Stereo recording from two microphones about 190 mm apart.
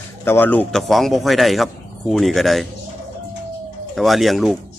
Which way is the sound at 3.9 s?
Centre (ahead or behind).